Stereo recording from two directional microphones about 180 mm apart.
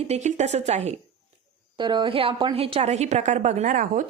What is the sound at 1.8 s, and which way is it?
Speech, 25° right (ahead or behind).